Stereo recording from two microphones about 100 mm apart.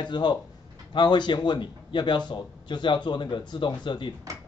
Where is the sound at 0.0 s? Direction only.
50° left (ahead or behind).